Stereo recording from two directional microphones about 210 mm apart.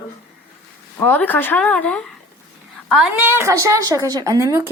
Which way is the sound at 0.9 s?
10° left (ahead or behind).